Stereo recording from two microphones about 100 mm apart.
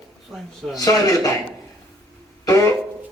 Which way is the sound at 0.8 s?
35° left (ahead or behind).